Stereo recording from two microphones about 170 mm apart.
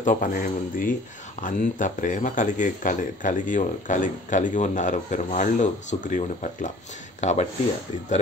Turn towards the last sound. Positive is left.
turn(degrees=45)  # may be behind; listen again after turning